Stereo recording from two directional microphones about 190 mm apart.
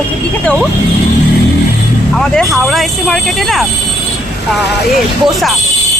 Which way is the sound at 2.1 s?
Centre (ahead or behind).